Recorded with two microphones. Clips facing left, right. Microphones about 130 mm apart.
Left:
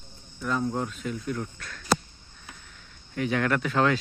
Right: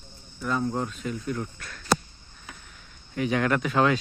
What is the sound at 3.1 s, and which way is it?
Speech, 20° right (ahead or behind).